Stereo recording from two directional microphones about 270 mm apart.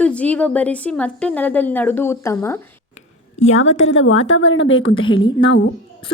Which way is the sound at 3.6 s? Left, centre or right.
Left.